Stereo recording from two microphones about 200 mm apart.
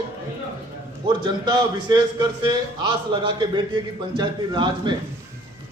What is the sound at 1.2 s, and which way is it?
A man's voice, 20° right (ahead or behind).